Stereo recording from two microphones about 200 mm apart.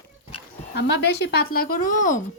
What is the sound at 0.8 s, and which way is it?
Speech, 55° left (ahead or behind).